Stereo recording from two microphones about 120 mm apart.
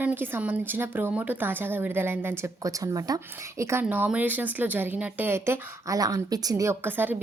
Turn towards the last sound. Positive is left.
turn(degrees=-15)  # may be behind; listen again after turning